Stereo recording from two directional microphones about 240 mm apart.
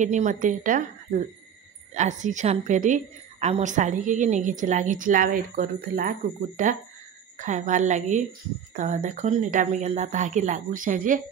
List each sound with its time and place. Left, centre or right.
0.0 s a woman's voice: right